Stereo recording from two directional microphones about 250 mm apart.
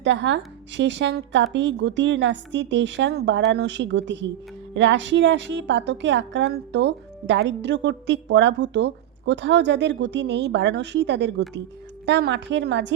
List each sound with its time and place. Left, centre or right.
0.0 s a woman's voice: right